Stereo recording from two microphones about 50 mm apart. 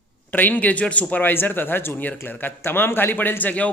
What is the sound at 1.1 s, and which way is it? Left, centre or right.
A man's voice, left.